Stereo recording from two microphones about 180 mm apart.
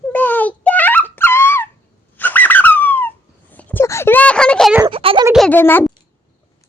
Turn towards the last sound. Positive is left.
turn(degrees=10)  # may be behind; listen again after turning